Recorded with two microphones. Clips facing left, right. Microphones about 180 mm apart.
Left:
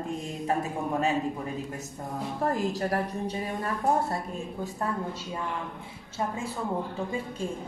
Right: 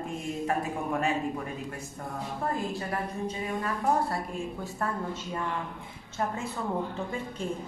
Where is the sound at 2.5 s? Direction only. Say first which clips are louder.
Left 3 dB; 90° left.